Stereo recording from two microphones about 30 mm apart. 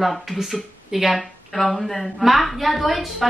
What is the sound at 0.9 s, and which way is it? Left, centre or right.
Laughter, centre.